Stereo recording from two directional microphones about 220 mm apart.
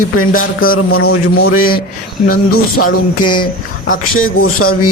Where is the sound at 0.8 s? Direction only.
70° left (ahead or behind).